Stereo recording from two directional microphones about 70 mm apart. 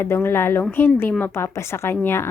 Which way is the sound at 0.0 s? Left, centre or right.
Left.